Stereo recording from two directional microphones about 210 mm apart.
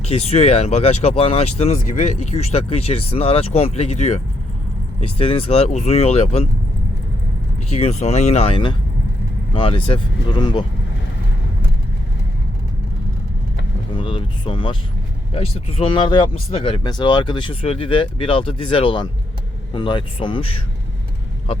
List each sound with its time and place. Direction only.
0.0 s speech: 30° left (ahead or behind)
7.7 s speech: 30° left (ahead or behind)
13.9 s speech: 25° left (ahead or behind)